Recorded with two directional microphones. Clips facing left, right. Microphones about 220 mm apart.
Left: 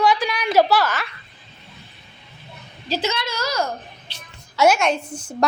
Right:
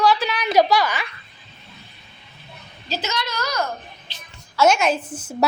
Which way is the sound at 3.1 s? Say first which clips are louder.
Left 2 dB; 30° left (ahead or behind).